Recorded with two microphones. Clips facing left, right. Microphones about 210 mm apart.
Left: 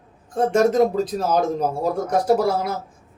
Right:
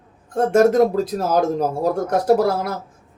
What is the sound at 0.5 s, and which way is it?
Speech, 5° right (ahead or behind).